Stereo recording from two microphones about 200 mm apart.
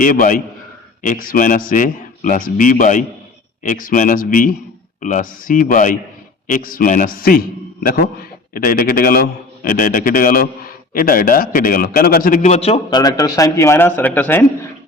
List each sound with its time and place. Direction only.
0.0 s a man's voice: 45° left (ahead or behind)
13.0 s a man's voice: 20° left (ahead or behind)